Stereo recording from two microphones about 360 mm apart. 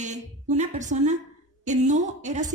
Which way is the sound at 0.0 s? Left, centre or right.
Centre.